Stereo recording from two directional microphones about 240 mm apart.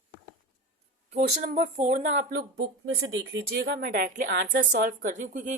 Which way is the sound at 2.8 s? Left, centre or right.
Right.